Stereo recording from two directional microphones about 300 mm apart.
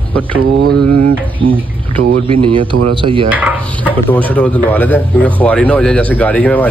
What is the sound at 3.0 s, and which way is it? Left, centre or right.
Speech, centre.